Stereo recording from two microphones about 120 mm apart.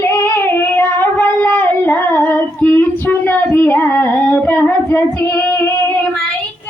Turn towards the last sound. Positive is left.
turn(degrees=20)  # may be behind; listen again after turning